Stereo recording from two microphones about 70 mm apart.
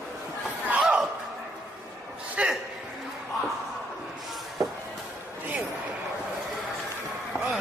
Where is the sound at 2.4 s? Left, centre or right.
Centre.